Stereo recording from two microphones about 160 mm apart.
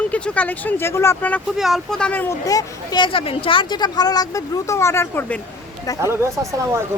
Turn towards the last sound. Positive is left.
turn(degrees=-20)  # may be behind; listen again after turning